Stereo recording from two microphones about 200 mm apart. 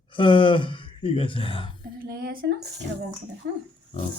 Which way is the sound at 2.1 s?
50° right (ahead or behind).